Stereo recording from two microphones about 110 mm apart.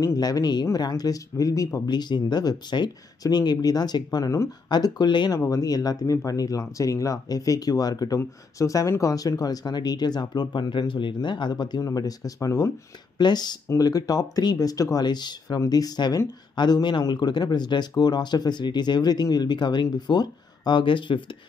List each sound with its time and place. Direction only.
0.0 s speech: 35° left (ahead or behind)
13.2 s speech: 40° left (ahead or behind)